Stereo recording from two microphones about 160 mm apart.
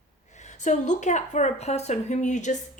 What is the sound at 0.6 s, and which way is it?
Speech, 50° left (ahead or behind).